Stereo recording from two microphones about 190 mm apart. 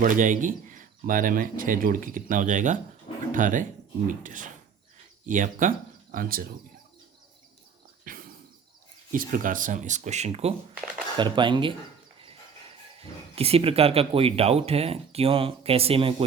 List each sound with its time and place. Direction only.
0.0 s speech: 45° right (ahead or behind)
8.0 s a sound: 45° right (ahead or behind)
9.1 s speech: 45° right (ahead or behind); by 11.7 s 25° right (ahead or behind)
13.3 s speech: 30° right (ahead or behind)